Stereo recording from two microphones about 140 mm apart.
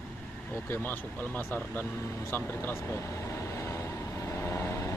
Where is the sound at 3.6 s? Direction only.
20° left (ahead or behind).